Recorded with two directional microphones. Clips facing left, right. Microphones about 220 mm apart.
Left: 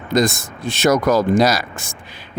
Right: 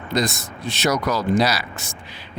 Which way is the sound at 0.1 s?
50° left (ahead or behind).